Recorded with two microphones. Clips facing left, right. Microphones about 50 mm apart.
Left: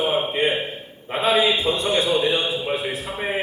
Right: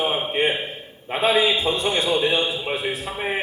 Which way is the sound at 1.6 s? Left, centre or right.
Right.